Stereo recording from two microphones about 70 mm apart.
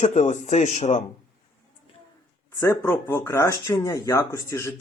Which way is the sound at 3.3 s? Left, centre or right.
Left.